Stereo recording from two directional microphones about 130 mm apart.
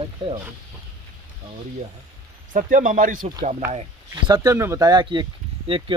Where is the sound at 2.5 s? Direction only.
85° right.